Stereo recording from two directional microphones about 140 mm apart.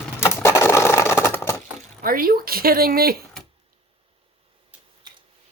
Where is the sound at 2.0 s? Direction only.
90° right.